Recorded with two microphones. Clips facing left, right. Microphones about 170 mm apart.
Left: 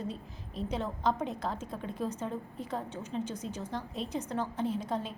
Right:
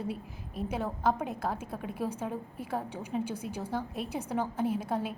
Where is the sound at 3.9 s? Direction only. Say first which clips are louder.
Even; 60° right (ahead or behind).